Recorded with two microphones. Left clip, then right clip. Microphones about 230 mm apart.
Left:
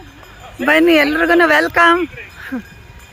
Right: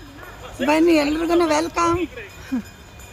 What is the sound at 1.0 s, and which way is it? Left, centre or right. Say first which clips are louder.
Speech: left 7 dB; left.